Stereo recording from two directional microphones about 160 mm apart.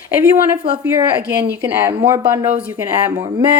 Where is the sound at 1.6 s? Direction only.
15° right (ahead or behind).